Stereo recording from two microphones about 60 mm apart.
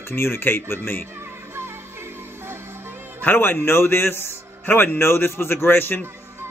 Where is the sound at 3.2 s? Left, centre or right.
Left.